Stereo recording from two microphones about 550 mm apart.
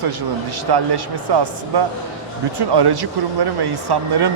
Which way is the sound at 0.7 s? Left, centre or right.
Right.